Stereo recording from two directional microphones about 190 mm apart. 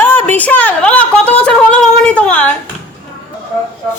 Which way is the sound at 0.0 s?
10° left (ahead or behind).